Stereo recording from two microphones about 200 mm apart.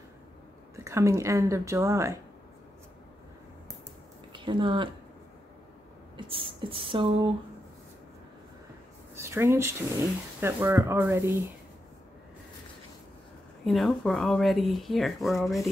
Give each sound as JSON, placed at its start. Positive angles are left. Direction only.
{"t": 0.8, "sound": "speech", "side_deg": -15}
{"t": 4.3, "sound": "speech", "side_deg": -25}
{"t": 6.1, "sound": "a sound", "side_deg": -25}
{"t": 9.1, "sound": "speech", "side_deg": -15}
{"t": 13.7, "sound": "speech", "side_deg": 0}